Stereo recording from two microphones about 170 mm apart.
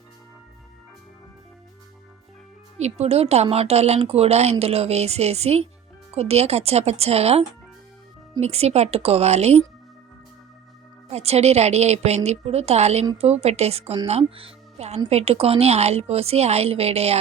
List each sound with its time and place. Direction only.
2.7 s speech: 40° right (ahead or behind)
11.1 s speech: 40° right (ahead or behind)